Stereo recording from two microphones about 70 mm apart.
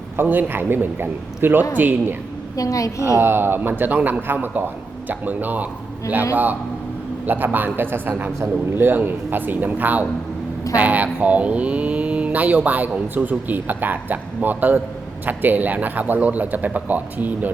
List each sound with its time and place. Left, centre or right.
0.2 s a man's voice: right
2.6 s a woman's voice: left
3.2 s speech: right